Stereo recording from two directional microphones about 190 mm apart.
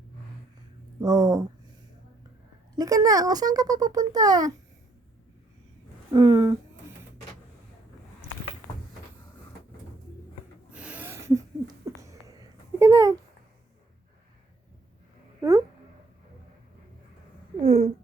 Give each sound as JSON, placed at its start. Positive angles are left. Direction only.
{"t": 1.0, "sound": "speech", "side_deg": -20}
{"t": 2.7, "sound": "a child's voice", "side_deg": -20}
{"t": 6.1, "sound": "a child's voice", "side_deg": -20}
{"t": 10.7, "sound": "a sound", "side_deg": -5}
{"t": 15.4, "sound": "a sound", "side_deg": -15}
{"t": 17.6, "sound": "babbling", "side_deg": -30}